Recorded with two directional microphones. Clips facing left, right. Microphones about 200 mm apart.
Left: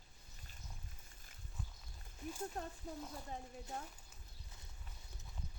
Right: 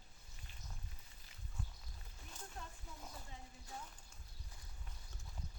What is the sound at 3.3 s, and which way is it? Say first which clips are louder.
Speech: left 9 dB; 50° left (ahead or behind).